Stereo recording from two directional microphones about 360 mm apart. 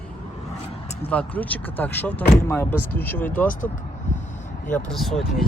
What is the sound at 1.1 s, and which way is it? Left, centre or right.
Speech, centre.